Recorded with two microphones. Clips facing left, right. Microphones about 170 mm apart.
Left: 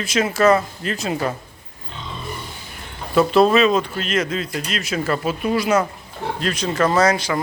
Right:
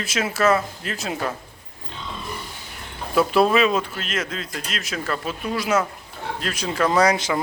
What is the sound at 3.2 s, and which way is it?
A man's voice, 10° right (ahead or behind).